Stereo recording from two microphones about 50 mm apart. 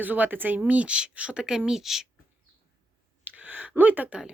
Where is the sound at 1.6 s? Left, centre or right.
Centre.